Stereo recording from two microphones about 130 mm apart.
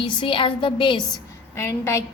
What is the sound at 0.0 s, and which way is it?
A woman's voice, 40° left (ahead or behind).